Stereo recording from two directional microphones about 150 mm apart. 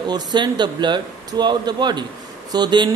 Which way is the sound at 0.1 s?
30° right (ahead or behind).